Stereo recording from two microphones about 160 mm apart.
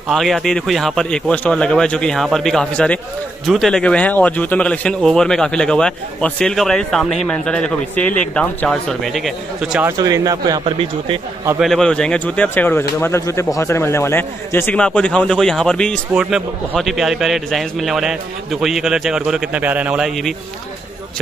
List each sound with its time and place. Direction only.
0.1 s a man's voice: centre (ahead or behind)
9.8 s speech: 20° right (ahead or behind)
11.6 s speech: 5° left (ahead or behind)
16.1 s a man's voice: 5° right (ahead or behind)